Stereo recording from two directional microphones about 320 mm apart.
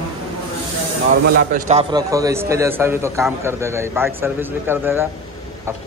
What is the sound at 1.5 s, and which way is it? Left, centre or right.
A man's voice, right.